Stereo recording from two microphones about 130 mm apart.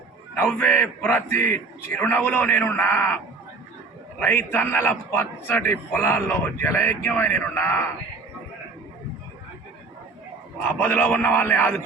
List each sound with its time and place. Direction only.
0.3 s a man's voice: 15° left (ahead or behind)
4.2 s a man's voice: 15° left (ahead or behind)
10.8 s a man's voice: 15° left (ahead or behind)